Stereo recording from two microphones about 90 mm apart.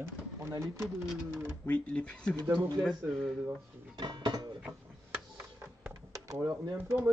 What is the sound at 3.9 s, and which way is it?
Speech, 55° right (ahead or behind).